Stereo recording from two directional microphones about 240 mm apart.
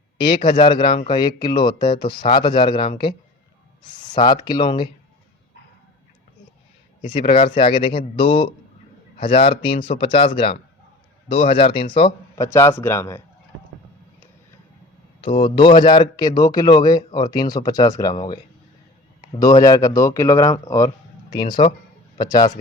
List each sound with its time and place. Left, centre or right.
0.5 s speech: centre
4.2 s speech: centre
7.0 s a man's voice: left
15.2 s speech: left